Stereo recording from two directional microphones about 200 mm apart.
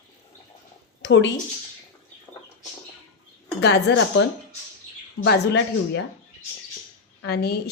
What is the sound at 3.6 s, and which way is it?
Speech, 55° left (ahead or behind).